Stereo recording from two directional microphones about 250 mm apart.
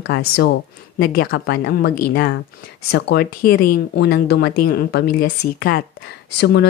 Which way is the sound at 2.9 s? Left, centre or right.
Left.